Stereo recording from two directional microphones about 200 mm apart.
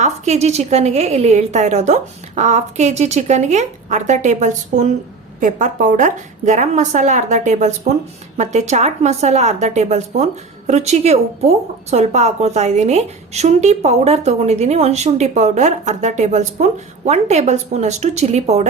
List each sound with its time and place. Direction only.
0.0 s speech: 35° right (ahead or behind)